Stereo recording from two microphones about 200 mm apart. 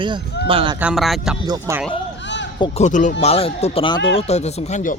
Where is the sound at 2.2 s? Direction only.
65° left (ahead or behind).